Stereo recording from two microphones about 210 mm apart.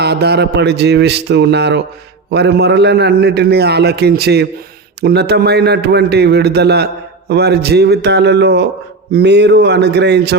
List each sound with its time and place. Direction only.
0.0 s a man's voice: 50° right (ahead or behind)